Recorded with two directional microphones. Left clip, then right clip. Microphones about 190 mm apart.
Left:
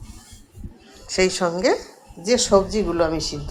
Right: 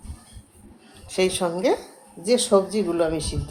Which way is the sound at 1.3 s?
Centre (ahead or behind).